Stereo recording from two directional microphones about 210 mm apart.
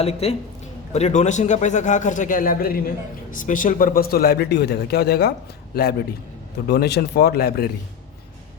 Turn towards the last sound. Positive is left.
turn(degrees=45)  # may be behind; listen again after turning